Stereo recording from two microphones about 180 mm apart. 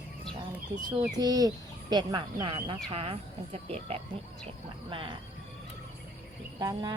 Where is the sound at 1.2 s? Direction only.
20° right (ahead or behind).